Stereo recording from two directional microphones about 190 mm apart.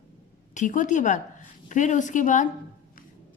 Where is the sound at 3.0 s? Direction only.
50° left (ahead or behind).